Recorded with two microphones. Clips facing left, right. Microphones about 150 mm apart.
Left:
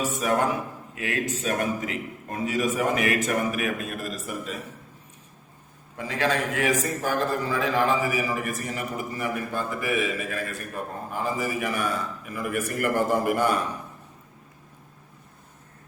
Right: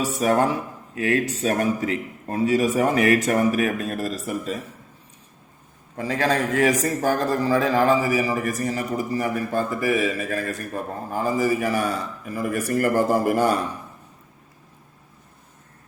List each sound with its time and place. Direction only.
0.0 s a man's voice: 35° right (ahead or behind)
6.0 s a man's voice: 40° right (ahead or behind)